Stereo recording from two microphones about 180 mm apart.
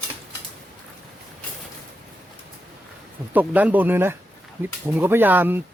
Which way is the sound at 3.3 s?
10° right (ahead or behind).